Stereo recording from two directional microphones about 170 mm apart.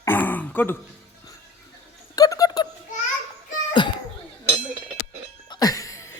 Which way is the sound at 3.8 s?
25° left (ahead or behind).